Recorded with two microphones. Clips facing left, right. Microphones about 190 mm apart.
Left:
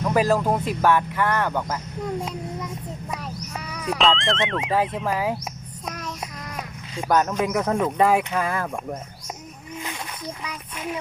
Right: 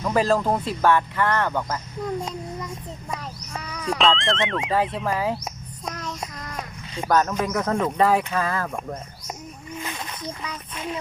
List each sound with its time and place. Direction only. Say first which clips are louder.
0.0 s speech: left 1 dB; 10° left (ahead or behind)
3.1 s a child's voice: right 1 dB; 5° left (ahead or behind)
8.7 s speech: left 1 dB; centre (ahead or behind)
9.8 s a sound: even; 10° left (ahead or behind)